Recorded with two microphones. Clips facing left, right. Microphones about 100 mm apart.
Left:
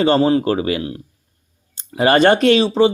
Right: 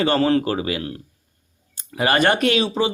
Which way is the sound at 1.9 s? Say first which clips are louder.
Left 6 dB; 30° left (ahead or behind).